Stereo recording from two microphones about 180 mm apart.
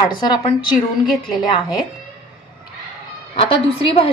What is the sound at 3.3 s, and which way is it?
Speech, 30° left (ahead or behind).